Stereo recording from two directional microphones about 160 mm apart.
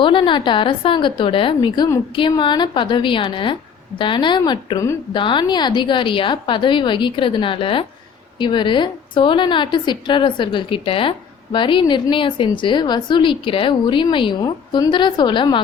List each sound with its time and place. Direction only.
0.0 s a woman's voice: 30° left (ahead or behind)